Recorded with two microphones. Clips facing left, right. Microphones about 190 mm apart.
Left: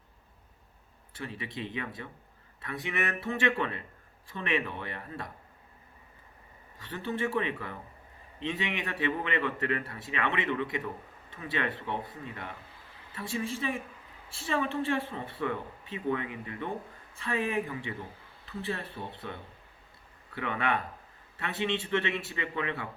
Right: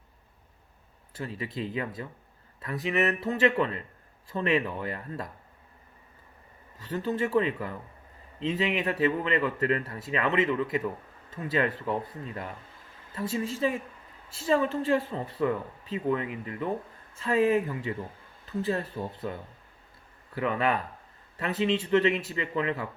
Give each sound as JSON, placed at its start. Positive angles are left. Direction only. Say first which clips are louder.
{"t": 1.1, "sound": "a woman's voice", "louder": "right 4 dB", "side_deg": -40}
{"t": 6.7, "sound": "a woman's voice", "louder": "right 5 dB", "side_deg": -40}
{"t": 8.5, "sound": "a woman's voice", "louder": "right 10 dB", "side_deg": -40}